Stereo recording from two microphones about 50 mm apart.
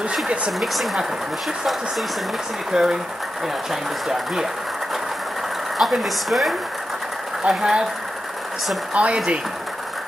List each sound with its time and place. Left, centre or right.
0.5 s a woman's voice: centre
2.7 s speech: centre
5.8 s a woman's voice: centre
7.4 s speech: centre
8.9 s speech: right